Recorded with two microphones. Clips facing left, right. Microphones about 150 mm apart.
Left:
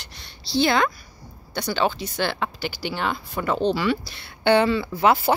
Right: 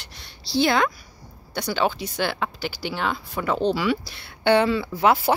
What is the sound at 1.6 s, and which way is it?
Speech, 5° right (ahead or behind).